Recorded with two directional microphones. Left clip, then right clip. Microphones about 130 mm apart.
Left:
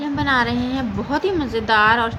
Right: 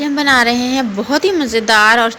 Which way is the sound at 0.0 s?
30° right (ahead or behind).